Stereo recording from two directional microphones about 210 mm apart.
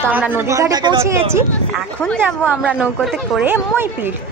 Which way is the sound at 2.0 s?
5° left (ahead or behind).